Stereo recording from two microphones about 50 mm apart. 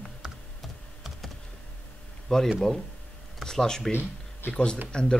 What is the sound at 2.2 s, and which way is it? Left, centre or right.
Speech, centre.